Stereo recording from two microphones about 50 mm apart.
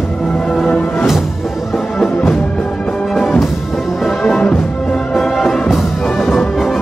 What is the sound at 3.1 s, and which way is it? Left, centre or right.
Music, centre.